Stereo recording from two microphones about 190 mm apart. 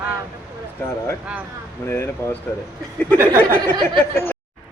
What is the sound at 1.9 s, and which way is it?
Speech, 10° left (ahead or behind).